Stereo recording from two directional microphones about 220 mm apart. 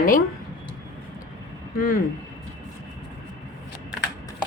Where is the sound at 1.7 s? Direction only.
40° left (ahead or behind).